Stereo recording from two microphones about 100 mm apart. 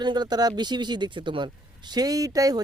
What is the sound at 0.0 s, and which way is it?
Speech, 45° right (ahead or behind).